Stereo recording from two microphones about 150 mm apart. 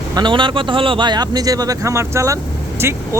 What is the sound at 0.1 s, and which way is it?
A man's voice, 30° right (ahead or behind).